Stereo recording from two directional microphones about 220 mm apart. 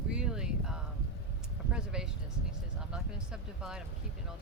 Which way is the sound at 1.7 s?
5° right (ahead or behind).